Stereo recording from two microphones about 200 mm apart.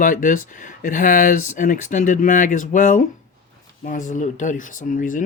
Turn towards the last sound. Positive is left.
turn(degrees=40)  # may be behind; listen again after turning